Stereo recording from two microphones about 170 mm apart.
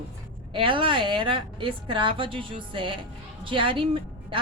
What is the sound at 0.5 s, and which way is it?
A woman's voice, 30° right (ahead or behind).